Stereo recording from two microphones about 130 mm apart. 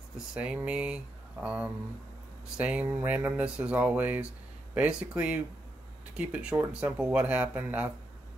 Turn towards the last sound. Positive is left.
turn(degrees=-10)  # may be behind; listen again after turning